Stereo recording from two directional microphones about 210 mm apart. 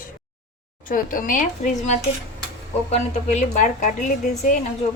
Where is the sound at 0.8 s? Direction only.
40° left (ahead or behind).